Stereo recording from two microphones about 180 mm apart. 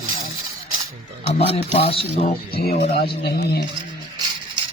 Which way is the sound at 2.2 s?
60° left (ahead or behind).